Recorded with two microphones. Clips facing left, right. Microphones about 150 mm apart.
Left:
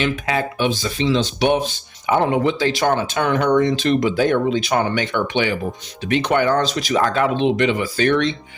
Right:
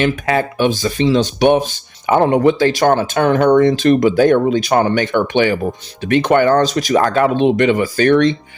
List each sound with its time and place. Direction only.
0.0 s speech: 50° right (ahead or behind)